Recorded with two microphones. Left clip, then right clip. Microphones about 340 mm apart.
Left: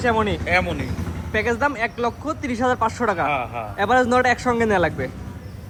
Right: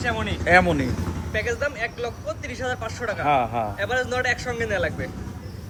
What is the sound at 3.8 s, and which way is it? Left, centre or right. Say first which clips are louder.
Speech: left 11 dB; centre.